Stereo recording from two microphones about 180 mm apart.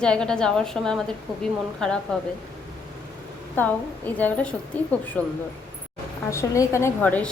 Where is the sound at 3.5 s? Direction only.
10° left (ahead or behind).